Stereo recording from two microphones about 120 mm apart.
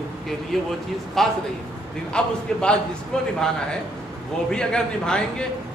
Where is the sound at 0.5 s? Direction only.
5° left (ahead or behind).